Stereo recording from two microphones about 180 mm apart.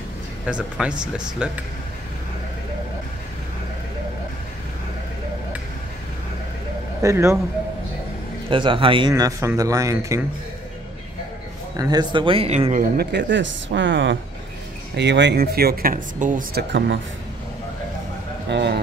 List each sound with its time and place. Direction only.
0.5 s speech: 5° right (ahead or behind)
7.0 s speech: 15° right (ahead or behind)
8.5 s a man's voice: 30° right (ahead or behind)
11.7 s a man's voice: 20° right (ahead or behind); by 12.8 s 35° right (ahead or behind)
12.9 s speech: 65° right (ahead or behind); by 14.1 s 90° right
15.0 s speech: 75° right (ahead or behind); by 16.6 s 45° right (ahead or behind)
16.7 s speech: 80° right
18.5 s a man's voice: 70° right (ahead or behind)